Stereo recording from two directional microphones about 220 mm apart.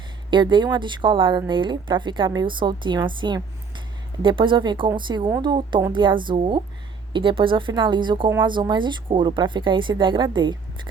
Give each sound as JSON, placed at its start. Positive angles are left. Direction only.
{"t": 0.3, "sound": "speech", "side_deg": -20}